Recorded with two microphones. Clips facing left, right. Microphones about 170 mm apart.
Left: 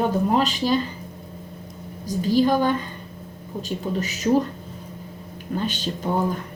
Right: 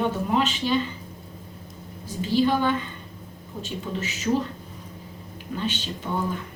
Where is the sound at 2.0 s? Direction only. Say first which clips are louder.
Left 3 dB; 45° left (ahead or behind).